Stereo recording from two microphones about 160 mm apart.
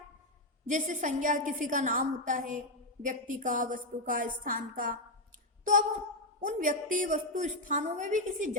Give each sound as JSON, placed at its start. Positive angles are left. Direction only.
{"t": 0.7, "sound": "a woman's voice", "side_deg": -55}
{"t": 6.4, "sound": "a woman's voice", "side_deg": -55}